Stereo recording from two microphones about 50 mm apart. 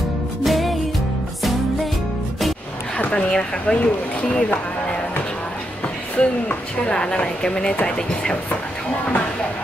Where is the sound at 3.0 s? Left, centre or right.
Left.